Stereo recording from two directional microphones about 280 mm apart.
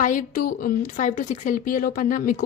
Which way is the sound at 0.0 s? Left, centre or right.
Left.